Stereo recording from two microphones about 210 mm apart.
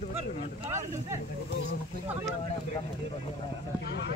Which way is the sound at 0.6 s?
15° right (ahead or behind).